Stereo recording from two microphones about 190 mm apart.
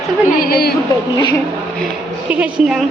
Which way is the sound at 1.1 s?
20° left (ahead or behind).